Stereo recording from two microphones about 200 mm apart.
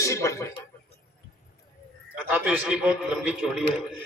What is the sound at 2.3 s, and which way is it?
A man's voice, 10° right (ahead or behind).